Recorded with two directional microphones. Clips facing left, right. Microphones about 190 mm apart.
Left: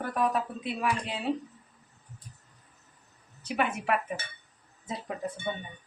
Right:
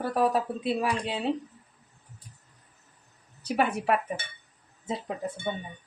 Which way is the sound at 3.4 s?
40° right (ahead or behind).